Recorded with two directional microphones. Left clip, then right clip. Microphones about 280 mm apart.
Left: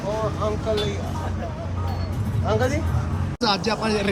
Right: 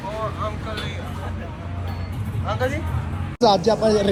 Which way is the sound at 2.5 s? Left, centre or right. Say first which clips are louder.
Left 2 dB; left.